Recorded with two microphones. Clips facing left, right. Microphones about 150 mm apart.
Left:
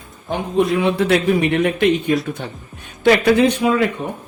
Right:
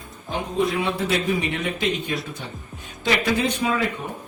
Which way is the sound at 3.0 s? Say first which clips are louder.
Left 9 dB; 65° left (ahead or behind).